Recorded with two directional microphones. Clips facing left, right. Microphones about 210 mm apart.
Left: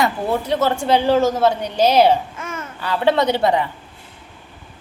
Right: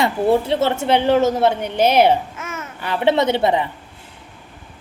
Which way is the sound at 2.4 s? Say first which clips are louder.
Left 1 dB; 5° right (ahead or behind).